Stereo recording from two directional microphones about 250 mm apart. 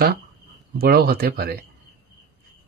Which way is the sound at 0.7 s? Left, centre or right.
Right.